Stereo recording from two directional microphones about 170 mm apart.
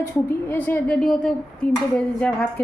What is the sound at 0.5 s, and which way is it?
A woman's voice, 10° left (ahead or behind).